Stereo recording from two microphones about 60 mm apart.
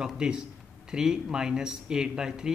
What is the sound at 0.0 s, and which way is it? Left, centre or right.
Speech, centre.